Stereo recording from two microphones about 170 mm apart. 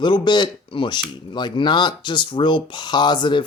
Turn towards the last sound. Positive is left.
turn(degrees=25)  # may be behind; listen again after turning